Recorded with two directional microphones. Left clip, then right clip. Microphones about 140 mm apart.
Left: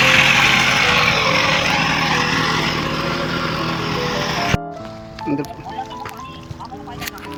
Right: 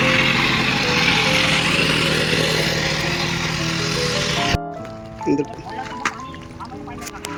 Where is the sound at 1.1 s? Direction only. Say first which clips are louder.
Left 1 dB; 40° left (ahead or behind).